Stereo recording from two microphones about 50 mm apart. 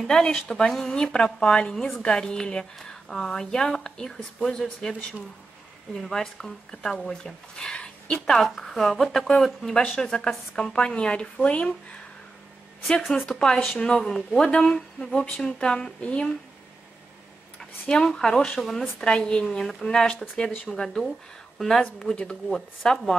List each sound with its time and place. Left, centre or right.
0.0 s speech: centre
5.9 s speech: centre; by 12.0 s left
13.1 s speech: centre
17.6 s speech: centre
22.1 s speech: left
22.5 s speech: centre